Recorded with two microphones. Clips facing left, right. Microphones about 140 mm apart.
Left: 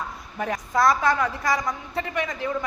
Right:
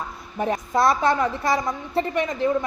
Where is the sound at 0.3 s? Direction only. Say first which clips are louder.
Right 2 dB; 25° right (ahead or behind).